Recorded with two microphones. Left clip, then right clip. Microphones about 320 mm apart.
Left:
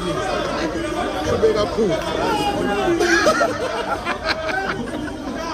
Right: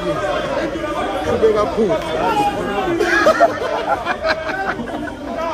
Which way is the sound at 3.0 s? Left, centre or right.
Centre.